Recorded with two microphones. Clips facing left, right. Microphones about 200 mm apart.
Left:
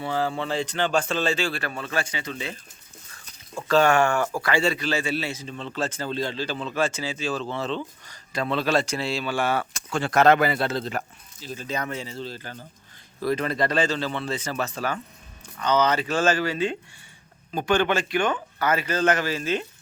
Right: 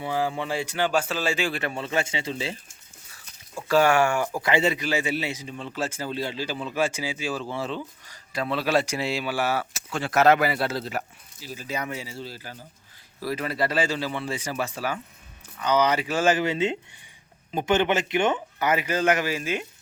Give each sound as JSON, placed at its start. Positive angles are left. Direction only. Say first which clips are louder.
{"t": 0.0, "sound": "speech", "louder": "left 1 dB", "side_deg": -15}
{"t": 3.7, "sound": "speech", "louder": "left 1 dB", "side_deg": -10}